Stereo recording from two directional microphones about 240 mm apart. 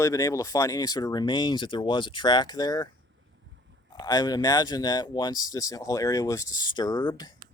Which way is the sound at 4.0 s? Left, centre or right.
Centre.